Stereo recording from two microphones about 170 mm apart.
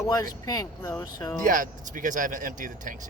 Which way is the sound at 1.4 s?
50° right (ahead or behind).